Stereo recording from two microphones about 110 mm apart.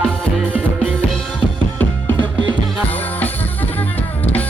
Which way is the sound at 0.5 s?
15° right (ahead or behind).